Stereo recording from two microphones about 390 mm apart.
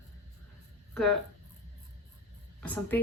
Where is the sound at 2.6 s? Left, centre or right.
Centre.